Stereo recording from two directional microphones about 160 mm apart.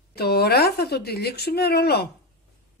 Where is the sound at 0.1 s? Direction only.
90° left.